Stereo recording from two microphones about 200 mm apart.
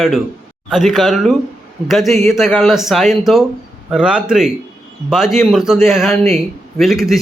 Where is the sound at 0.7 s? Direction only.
Centre (ahead or behind).